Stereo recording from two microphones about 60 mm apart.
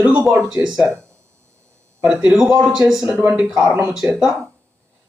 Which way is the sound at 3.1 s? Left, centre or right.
Right.